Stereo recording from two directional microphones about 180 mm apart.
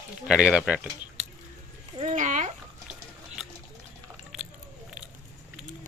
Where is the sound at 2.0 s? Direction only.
40° right (ahead or behind).